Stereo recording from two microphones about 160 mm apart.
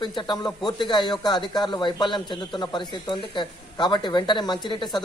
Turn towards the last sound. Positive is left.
turn(degrees=30)  # may be behind; listen again after turning